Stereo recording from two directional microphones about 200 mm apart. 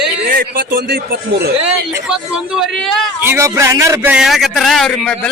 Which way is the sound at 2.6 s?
Centre (ahead or behind).